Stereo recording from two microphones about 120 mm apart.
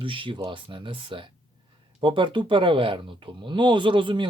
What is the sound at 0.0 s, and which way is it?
A man's voice, 45° right (ahead or behind).